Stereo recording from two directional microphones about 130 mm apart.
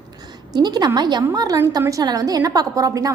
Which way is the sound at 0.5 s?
30° right (ahead or behind).